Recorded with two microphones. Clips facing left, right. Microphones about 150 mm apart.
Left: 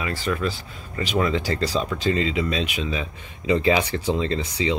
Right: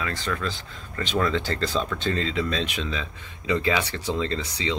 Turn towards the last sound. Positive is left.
turn(degrees=15)  # may be behind; listen again after turning